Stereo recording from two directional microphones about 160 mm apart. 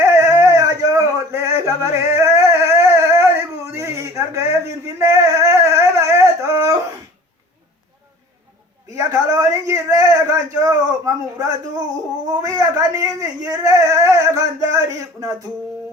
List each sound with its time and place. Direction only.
0.0 s dog: 15° right (ahead or behind)
3.8 s a sound: 20° right (ahead or behind)
9.0 s speech: 20° right (ahead or behind)